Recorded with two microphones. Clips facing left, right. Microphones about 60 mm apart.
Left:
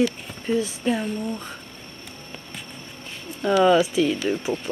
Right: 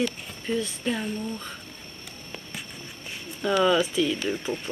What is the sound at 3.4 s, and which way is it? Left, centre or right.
Speech, centre.